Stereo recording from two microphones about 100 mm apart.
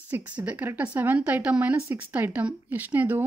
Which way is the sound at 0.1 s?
15° right (ahead or behind).